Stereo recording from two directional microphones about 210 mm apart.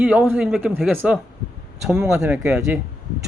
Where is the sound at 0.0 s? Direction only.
5° right (ahead or behind).